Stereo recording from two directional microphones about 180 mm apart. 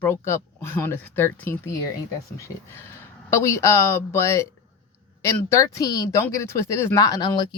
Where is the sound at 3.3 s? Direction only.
15° left (ahead or behind).